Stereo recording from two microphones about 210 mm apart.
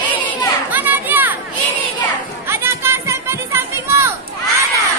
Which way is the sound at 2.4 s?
10° right (ahead or behind).